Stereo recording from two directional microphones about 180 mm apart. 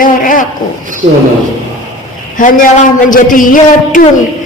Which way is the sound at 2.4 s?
50° left (ahead or behind).